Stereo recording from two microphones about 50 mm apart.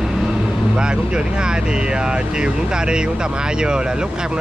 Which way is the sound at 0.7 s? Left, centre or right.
Centre.